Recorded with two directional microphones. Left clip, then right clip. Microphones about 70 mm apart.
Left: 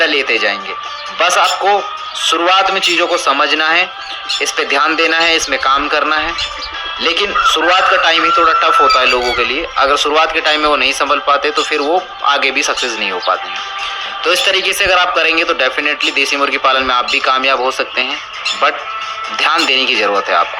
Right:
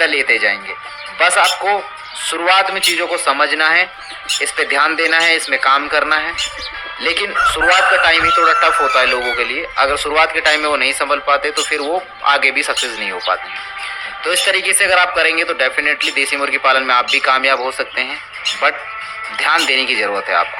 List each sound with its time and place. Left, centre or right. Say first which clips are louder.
0.0 s a man's voice: left 1 dB; left
14.4 s a man's voice: left 2 dB; left
19.6 s a man's voice: left 3 dB; left